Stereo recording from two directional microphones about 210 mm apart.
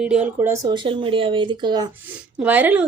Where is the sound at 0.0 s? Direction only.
5° right (ahead or behind).